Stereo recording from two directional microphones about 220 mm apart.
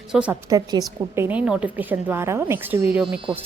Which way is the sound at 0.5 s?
15° right (ahead or behind).